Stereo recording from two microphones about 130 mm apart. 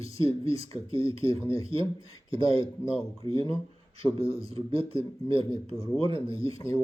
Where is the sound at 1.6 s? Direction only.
45° right (ahead or behind).